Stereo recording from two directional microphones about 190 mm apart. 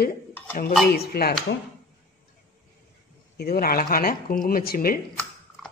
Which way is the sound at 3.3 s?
55° left (ahead or behind).